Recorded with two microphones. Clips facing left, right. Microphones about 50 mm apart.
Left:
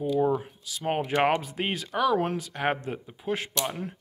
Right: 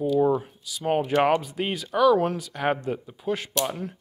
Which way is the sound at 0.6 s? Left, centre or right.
Left.